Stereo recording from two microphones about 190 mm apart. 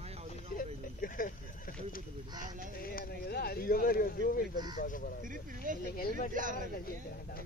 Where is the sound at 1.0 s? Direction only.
45° left (ahead or behind).